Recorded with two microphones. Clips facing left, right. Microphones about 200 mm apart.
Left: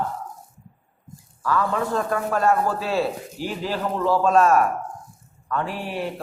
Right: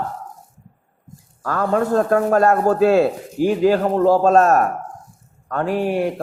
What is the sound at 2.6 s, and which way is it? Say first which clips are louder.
Speech: right 9 dB; 45° right (ahead or behind).